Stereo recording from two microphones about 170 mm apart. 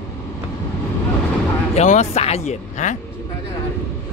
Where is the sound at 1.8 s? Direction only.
40° left (ahead or behind).